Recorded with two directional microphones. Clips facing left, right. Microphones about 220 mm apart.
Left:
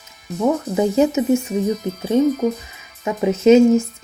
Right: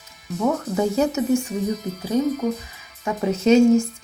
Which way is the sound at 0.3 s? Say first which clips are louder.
Left 3 dB; 20° left (ahead or behind).